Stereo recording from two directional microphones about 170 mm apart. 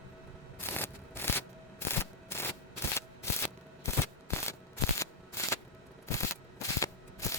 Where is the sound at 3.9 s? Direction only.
15° left (ahead or behind).